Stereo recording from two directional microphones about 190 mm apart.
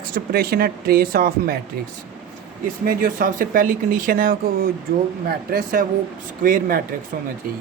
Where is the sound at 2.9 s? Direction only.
45° right (ahead or behind).